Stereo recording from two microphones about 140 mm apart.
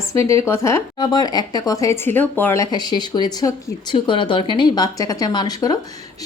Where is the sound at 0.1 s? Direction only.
20° left (ahead or behind).